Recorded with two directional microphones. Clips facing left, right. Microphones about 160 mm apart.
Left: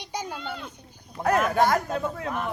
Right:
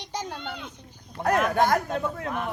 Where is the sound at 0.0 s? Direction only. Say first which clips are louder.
Even; 10° left (ahead or behind).